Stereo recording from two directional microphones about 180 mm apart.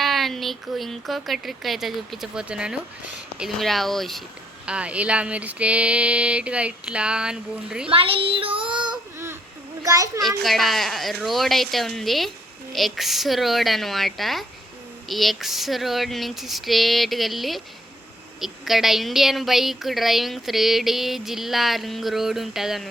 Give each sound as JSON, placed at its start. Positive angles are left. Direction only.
{"t": 0.0, "sound": "a woman's voice", "side_deg": 0}
{"t": 4.6, "sound": "a sound", "side_deg": -5}
{"t": 7.9, "sound": "child singing", "side_deg": -30}
{"t": 9.8, "sound": "a child's voice", "side_deg": -20}
{"t": 10.2, "sound": "a woman's voice", "side_deg": 0}